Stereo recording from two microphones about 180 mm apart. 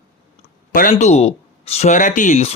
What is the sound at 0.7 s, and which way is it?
Speech, 50° left (ahead or behind).